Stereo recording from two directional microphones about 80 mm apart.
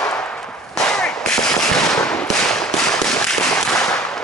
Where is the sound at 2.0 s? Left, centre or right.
Centre.